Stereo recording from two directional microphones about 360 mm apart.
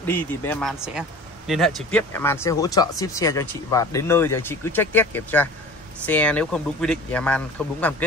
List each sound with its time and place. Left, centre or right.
0.0 s speech: centre